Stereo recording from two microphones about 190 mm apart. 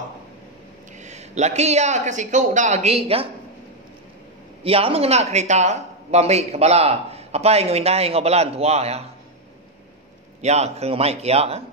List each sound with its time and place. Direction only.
0.9 s speech: 35° right (ahead or behind)
4.6 s speech: 30° right (ahead or behind)
10.4 s speech: 35° right (ahead or behind)